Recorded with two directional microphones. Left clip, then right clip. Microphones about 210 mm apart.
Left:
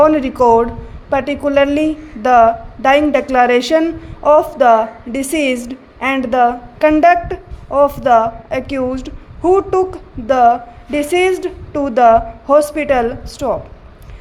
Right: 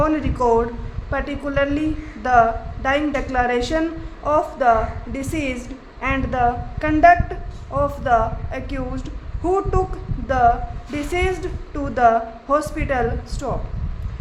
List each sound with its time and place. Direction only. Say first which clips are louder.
0.0 s a woman's voice: left 9 dB; 30° left (ahead or behind)